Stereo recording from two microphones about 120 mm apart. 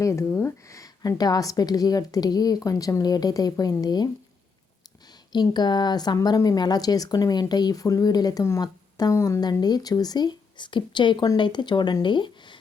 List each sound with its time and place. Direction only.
0.0 s speech: 25° left (ahead or behind)
5.3 s speech: 35° left (ahead or behind)